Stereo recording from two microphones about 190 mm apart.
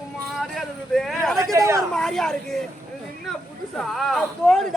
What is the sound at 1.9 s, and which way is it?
Speech, centre (ahead or behind).